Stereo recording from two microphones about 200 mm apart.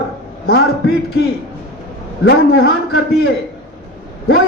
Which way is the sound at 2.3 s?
55° left (ahead or behind).